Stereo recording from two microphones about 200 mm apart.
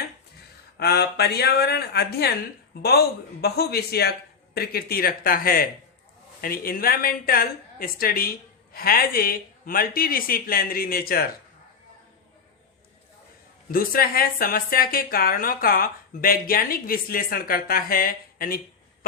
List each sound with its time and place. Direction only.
0.8 s a woman's voice: 55° left (ahead or behind)
3.4 s a woman's voice: 50° left (ahead or behind)
13.7 s a woman's voice: 45° left (ahead or behind)